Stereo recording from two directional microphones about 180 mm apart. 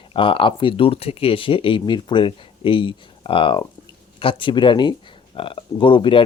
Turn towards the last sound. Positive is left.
turn(degrees=30)  # may be behind; listen again after turning